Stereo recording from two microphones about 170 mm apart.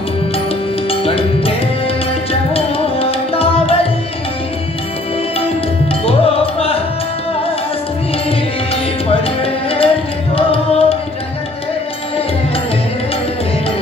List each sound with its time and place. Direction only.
0.8 s music: 35° left (ahead or behind)
2.5 s music: 35° left (ahead or behind)
6.0 s music: 35° left (ahead or behind)
9.1 s music: 35° left (ahead or behind)